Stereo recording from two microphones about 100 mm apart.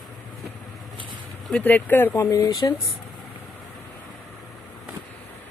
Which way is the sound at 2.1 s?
30° left (ahead or behind).